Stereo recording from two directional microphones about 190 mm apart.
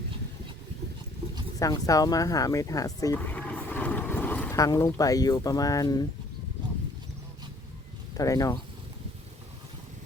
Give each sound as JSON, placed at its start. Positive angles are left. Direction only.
{"t": 1.5, "sound": "speech", "side_deg": 20}
{"t": 8.1, "sound": "speech", "side_deg": 20}